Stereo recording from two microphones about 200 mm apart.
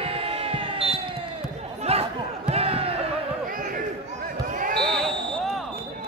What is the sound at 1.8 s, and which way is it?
Crowd, 30° right (ahead or behind).